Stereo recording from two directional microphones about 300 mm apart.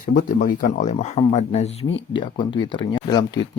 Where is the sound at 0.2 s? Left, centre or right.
Left.